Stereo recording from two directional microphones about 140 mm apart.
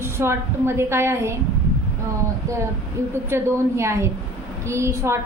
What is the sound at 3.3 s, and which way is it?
A woman's voice, 15° right (ahead or behind).